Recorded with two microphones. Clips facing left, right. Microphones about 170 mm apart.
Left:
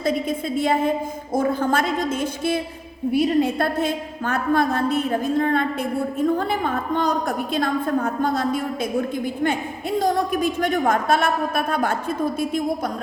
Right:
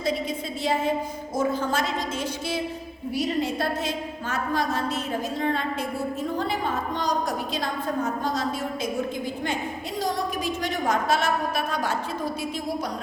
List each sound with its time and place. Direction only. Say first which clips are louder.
0.0 s a woman's voice: left 4 dB; 55° left (ahead or behind)